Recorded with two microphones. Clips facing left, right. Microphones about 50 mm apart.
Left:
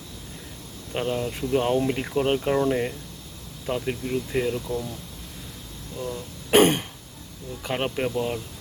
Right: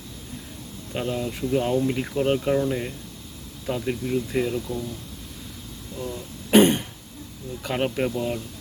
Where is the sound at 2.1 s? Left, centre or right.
Left.